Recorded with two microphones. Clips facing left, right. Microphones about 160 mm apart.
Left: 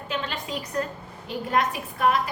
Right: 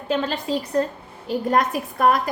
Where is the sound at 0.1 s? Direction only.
35° right (ahead or behind).